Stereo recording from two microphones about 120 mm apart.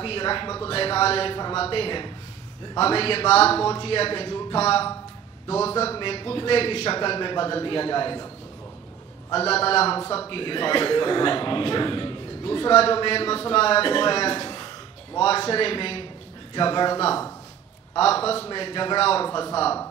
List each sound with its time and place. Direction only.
0.0 s a man's voice: 45° left (ahead or behind)
9.4 s a man's voice: 55° left (ahead or behind)
10.3 s a man's voice: 45° left (ahead or behind)
17.9 s a man's voice: 55° left (ahead or behind)
18.5 s a man's voice: 45° left (ahead or behind)
19.2 s a man's voice: 30° left (ahead or behind)